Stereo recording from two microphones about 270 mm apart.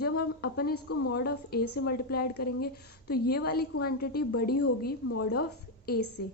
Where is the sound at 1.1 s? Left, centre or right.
Left.